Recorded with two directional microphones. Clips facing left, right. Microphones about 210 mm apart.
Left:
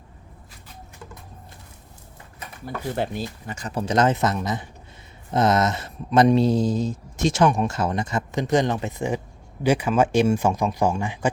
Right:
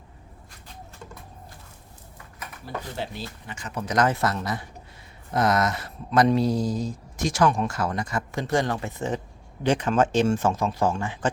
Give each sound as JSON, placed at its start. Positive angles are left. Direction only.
{"t": 2.9, "sound": "speech", "side_deg": 55}
{"t": 3.4, "sound": "speech", "side_deg": 40}